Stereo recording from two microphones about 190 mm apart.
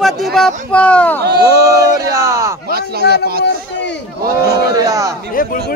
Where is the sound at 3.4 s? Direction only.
65° left (ahead or behind).